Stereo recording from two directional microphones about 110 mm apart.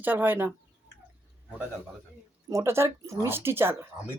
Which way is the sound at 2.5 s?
25° right (ahead or behind).